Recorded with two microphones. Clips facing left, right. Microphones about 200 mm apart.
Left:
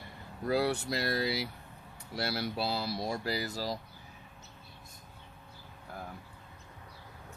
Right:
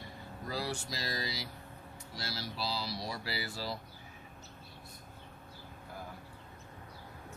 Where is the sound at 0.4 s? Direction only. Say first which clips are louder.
Left 9 dB; 60° left (ahead or behind); by 3.8 s 40° left (ahead or behind).